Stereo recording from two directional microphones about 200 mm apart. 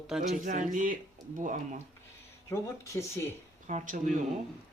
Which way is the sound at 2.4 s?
15° left (ahead or behind).